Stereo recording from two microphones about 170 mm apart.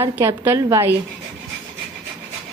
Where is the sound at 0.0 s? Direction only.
15° right (ahead or behind).